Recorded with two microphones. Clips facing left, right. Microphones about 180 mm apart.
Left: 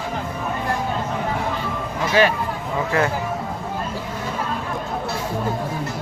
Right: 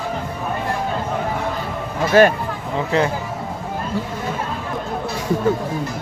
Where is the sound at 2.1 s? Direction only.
50° right (ahead or behind).